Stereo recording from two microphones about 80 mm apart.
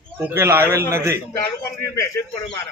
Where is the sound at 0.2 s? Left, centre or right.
Right.